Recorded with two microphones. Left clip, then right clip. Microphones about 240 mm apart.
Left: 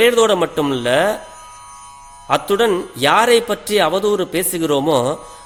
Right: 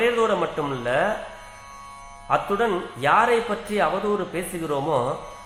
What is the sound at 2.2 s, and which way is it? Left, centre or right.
A man's voice, left.